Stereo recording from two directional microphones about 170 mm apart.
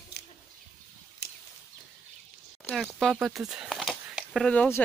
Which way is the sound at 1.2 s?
70° left (ahead or behind).